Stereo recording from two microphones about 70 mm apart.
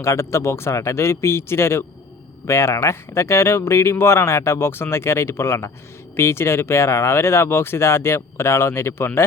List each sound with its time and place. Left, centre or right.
0.0 s speech: left